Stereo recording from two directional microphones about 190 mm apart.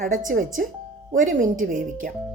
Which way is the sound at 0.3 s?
45° right (ahead or behind).